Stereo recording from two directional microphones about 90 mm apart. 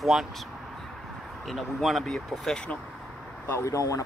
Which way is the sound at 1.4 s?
Centre (ahead or behind).